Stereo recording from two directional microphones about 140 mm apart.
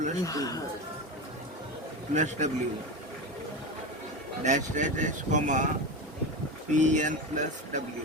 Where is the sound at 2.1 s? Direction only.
60° right (ahead or behind).